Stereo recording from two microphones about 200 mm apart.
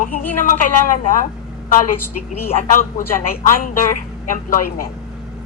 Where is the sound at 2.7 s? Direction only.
40° left (ahead or behind).